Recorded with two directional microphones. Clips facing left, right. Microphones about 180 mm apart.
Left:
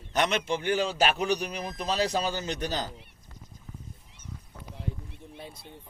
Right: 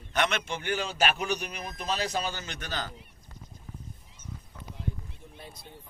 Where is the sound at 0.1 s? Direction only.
35° left (ahead or behind).